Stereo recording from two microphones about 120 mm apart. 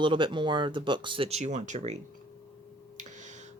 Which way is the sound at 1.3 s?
70° right (ahead or behind).